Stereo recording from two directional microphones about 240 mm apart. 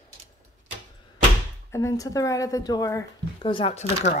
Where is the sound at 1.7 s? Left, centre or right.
Centre.